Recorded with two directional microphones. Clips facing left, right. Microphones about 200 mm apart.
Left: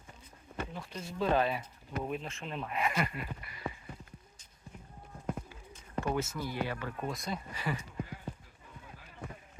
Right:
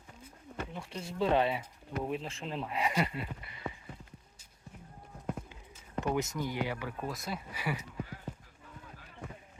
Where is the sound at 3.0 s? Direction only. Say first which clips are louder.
Right 1 dB; 25° right (ahead or behind).